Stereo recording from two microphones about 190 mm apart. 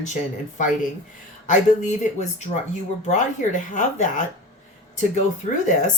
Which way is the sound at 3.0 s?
40° left (ahead or behind).